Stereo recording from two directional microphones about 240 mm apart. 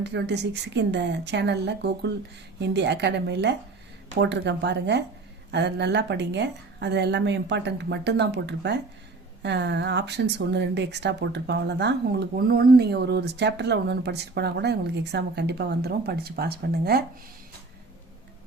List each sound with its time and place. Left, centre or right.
0.0 s speech: right